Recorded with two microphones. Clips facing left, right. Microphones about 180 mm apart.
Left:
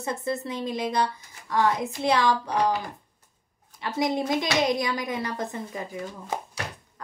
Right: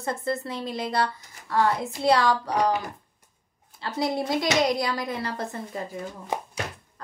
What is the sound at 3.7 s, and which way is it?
A woman's voice, 15° left (ahead or behind).